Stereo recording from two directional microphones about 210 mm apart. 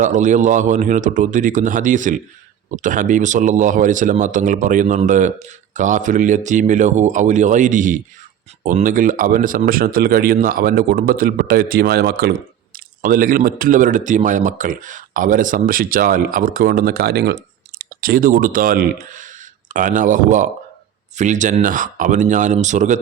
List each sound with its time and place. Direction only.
0.0 s speech: 35° right (ahead or behind)